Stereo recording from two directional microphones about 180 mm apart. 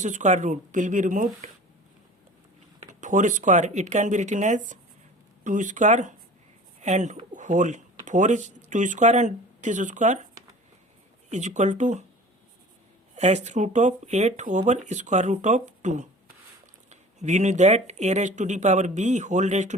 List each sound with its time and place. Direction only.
0.0 s speech: 40° right (ahead or behind)
3.0 s speech: 45° right (ahead or behind)
11.3 s speech: 40° right (ahead or behind)
13.1 s speech: 40° right (ahead or behind)